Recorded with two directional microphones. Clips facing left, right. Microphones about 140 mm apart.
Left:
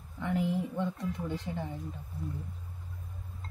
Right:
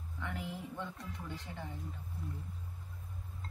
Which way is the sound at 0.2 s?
20° left (ahead or behind).